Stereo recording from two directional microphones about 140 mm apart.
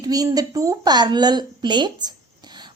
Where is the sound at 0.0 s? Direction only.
25° right (ahead or behind).